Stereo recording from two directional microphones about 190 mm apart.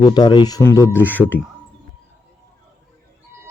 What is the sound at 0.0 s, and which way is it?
Speech, 25° left (ahead or behind).